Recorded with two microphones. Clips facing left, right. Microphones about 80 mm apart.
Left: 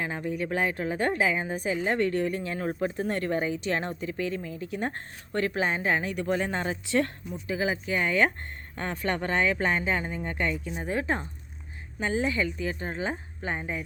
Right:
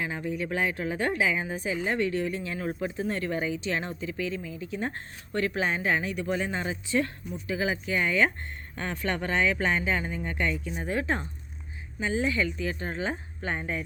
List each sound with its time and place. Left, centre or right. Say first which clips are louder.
0.0 s speech: left 1 dB; left
6.1 s speech: left 2 dB; left
7.4 s speech: left 1 dB; left
13.6 s speech: right 1 dB; centre